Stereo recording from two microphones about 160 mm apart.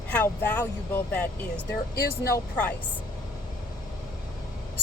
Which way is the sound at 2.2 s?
70° left (ahead or behind).